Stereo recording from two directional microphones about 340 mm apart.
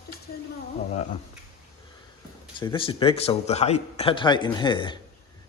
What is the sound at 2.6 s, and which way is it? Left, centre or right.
A man's voice, centre.